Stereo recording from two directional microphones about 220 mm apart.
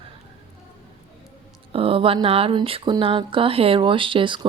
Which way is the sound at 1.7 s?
25° right (ahead or behind).